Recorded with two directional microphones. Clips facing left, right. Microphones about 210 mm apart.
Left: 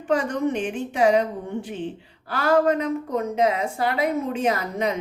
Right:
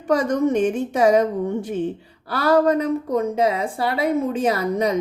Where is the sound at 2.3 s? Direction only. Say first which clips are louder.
Right 2 dB; 35° right (ahead or behind).